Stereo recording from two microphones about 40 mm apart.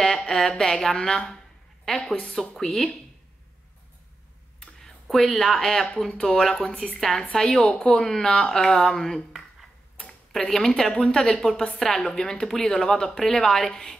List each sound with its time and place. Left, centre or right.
0.0 s a woman's voice: centre
2.2 s speech: centre
5.0 s speech: centre
6.5 s speech: left
7.0 s speech: centre
10.3 s speech: centre
12.2 s speech: centre